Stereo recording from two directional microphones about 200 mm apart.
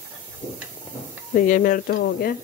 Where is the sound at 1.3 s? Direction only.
40° left (ahead or behind).